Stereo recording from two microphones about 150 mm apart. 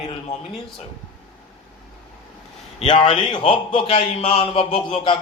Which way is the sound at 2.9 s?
35° left (ahead or behind).